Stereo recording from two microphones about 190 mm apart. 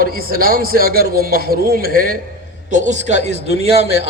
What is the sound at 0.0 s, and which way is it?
A man's voice, 50° right (ahead or behind).